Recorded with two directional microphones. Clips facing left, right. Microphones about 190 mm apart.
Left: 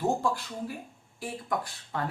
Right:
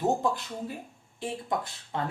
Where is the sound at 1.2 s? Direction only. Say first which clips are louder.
Right 1 dB; 25° right (ahead or behind).